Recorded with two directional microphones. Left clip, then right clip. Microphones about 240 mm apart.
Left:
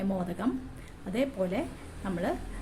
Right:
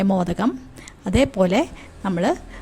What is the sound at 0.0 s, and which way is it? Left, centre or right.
A woman's voice, right.